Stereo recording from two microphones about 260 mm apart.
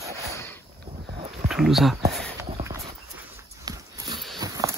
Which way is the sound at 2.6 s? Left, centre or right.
Centre.